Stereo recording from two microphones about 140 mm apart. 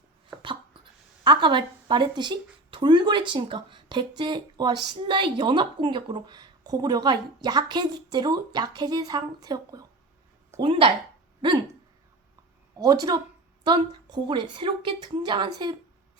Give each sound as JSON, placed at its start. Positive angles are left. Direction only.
{"t": 1.2, "sound": "speech", "side_deg": -30}
{"t": 10.6, "sound": "speech", "side_deg": -40}
{"t": 12.8, "sound": "a woman's voice", "side_deg": -25}